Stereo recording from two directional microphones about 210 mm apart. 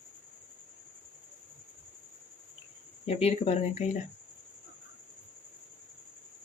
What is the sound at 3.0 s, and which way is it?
Speech, 30° left (ahead or behind).